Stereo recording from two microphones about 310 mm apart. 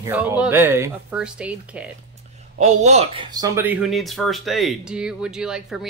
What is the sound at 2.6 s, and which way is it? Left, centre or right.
Speech, right.